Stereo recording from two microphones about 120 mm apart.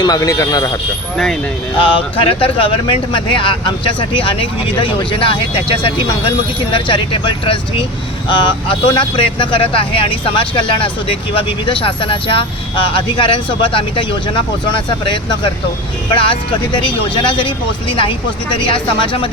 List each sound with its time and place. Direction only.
0.0 s speech: 30° left (ahead or behind)
1.1 s speech: centre (ahead or behind)
1.8 s speech: 50° left (ahead or behind)